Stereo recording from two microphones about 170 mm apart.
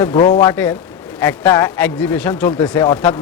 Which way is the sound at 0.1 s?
25° left (ahead or behind).